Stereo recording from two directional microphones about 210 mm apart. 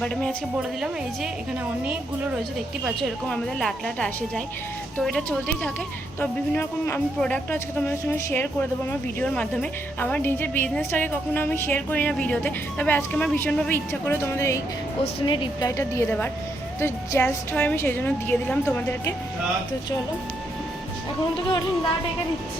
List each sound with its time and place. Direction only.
0.0 s a woman's voice: 5° left (ahead or behind)
2.8 s a woman's voice: 5° left (ahead or behind); by 15.7 s 20° left (ahead or behind)
15.8 s speech: 10° left (ahead or behind)